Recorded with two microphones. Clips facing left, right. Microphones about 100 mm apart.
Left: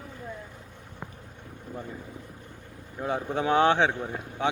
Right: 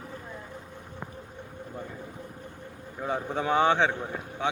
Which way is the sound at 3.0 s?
5° left (ahead or behind).